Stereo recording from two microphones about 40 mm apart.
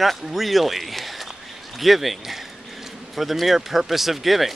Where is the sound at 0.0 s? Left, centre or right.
Centre.